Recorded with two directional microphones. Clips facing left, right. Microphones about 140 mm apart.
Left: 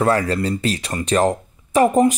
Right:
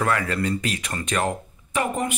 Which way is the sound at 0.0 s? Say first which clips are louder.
Left 5 dB; 30° left (ahead or behind).